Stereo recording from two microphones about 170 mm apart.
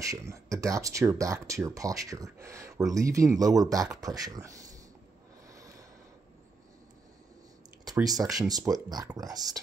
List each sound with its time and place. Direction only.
0.0 s speech: 20° right (ahead or behind)
5.5 s a sound: 20° right (ahead or behind)
7.8 s speech: 20° right (ahead or behind)